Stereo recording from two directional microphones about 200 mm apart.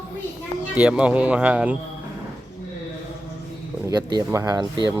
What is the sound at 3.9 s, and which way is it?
Speech, 15° right (ahead or behind).